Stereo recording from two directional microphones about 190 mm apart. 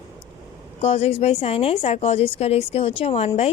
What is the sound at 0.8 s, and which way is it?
A woman's voice, 30° left (ahead or behind).